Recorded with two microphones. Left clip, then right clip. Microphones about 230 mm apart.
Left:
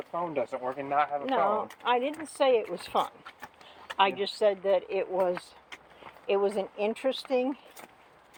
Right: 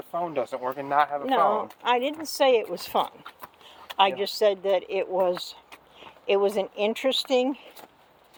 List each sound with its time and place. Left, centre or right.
0.1 s speech: right